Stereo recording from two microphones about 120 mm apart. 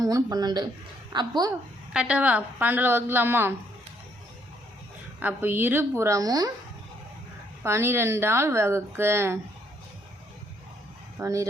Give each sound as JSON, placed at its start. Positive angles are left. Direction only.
{"t": 0.0, "sound": "speech", "side_deg": -30}
{"t": 1.9, "sound": "a woman's voice", "side_deg": -10}
{"t": 5.2, "sound": "a woman's voice", "side_deg": -15}
{"t": 7.6, "sound": "speech", "side_deg": -20}
{"t": 11.2, "sound": "speech", "side_deg": -25}